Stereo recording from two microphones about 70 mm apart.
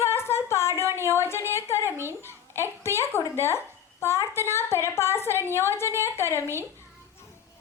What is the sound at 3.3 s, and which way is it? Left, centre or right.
A woman's voice, left.